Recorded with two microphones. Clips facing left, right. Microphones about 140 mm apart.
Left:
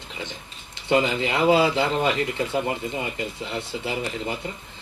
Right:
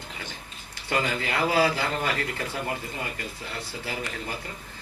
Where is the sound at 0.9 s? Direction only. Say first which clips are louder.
Left 6 dB; 20° left (ahead or behind).